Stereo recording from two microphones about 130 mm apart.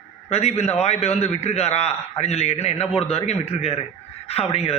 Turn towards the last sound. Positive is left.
turn(degrees=50)  # may be behind; listen again after turning